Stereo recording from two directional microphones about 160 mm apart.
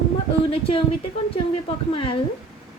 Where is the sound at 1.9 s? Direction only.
35° left (ahead or behind).